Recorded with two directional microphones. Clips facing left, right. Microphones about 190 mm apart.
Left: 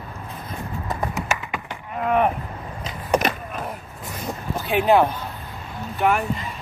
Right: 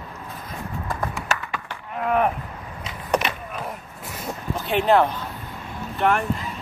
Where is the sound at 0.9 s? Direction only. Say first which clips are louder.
Left 2 dB; 20° left (ahead or behind).